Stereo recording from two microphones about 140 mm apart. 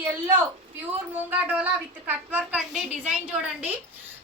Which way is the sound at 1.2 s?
10° right (ahead or behind).